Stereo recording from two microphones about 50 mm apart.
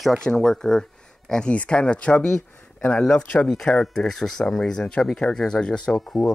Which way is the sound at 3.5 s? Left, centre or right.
Centre.